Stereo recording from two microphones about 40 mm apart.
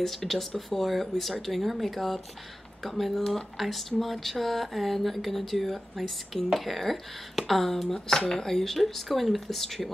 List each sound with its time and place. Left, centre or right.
0.0 s speech: centre